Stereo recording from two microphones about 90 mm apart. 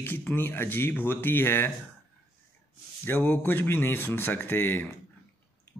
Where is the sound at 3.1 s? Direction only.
25° left (ahead or behind).